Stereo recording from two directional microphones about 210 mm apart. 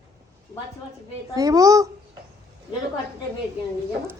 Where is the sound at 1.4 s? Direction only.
15° right (ahead or behind).